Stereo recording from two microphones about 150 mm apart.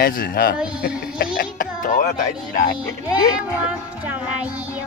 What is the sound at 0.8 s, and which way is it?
Music, 80° left.